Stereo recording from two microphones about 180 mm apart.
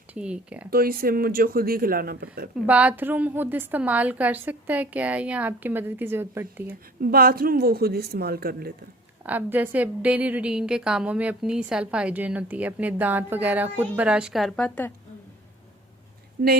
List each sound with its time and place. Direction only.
0.1 s a woman's voice: 5° right (ahead or behind)
0.7 s speech: 55° right (ahead or behind)
2.6 s a woman's voice: 5° right (ahead or behind)
7.0 s speech: 55° right (ahead or behind)
9.2 s a woman's voice: 10° right (ahead or behind); by 14.9 s 10° left (ahead or behind)
16.4 s speech: 60° right (ahead or behind)